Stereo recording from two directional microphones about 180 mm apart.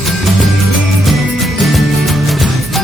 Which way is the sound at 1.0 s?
Centre (ahead or behind).